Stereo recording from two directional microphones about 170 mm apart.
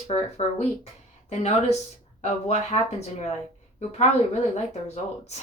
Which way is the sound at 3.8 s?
40° left (ahead or behind).